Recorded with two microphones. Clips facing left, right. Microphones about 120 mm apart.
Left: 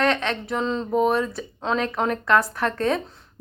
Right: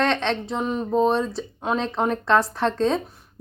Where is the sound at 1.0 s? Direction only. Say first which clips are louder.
Right 1 dB; 25° right (ahead or behind).